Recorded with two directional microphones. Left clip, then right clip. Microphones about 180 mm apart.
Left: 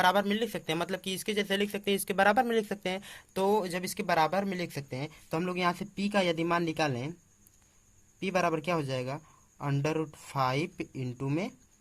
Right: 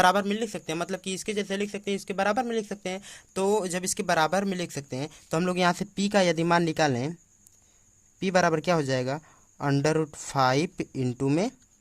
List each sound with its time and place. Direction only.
0.0 s speech: 45° right (ahead or behind); by 7.1 s 70° right (ahead or behind)
8.2 s speech: 75° right (ahead or behind)